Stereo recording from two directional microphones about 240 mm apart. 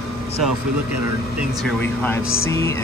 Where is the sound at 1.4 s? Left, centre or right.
Centre.